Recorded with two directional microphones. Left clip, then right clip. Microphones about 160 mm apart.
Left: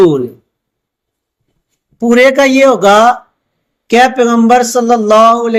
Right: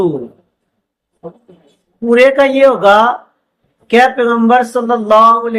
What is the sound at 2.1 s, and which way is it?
A man's voice, 75° left (ahead or behind).